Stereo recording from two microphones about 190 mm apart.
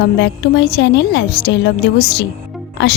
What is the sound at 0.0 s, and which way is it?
A woman's voice, 65° left (ahead or behind).